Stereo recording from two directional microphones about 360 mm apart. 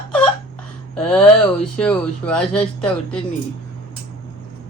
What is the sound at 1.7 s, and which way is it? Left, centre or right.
Speech, centre.